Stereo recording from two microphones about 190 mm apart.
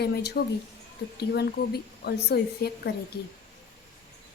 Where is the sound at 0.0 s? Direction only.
60° left (ahead or behind).